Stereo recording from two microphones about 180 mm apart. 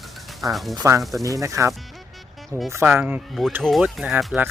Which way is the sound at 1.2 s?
20° right (ahead or behind).